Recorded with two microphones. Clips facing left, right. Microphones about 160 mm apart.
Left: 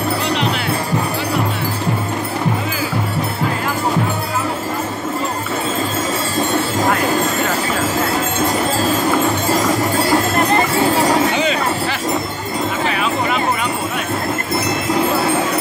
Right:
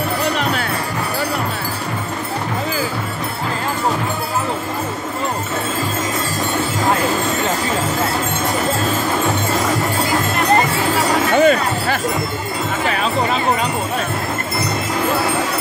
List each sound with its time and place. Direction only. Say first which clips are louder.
11.3 s music: right 4 dB; 50° right (ahead or behind)
12.8 s music: right 3 dB; 35° right (ahead or behind)